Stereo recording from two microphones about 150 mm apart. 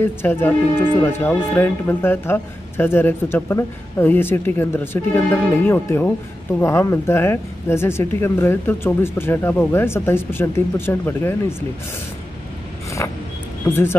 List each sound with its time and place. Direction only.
0.0 s speech: 15° left (ahead or behind)
13.7 s speech: 15° left (ahead or behind)